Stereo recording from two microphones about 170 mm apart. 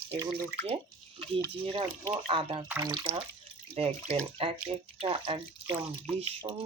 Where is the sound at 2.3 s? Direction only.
35° right (ahead or behind).